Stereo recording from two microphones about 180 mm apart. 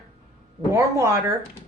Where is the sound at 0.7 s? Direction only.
15° right (ahead or behind).